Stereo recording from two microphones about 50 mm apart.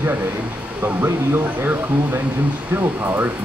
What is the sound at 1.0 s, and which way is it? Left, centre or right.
Speech, right.